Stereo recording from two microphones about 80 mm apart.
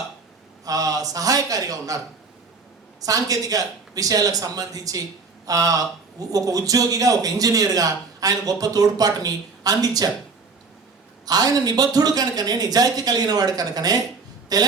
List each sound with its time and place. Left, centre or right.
0.6 s a man's voice: right
3.0 s a man's voice: right
11.3 s a man's voice: right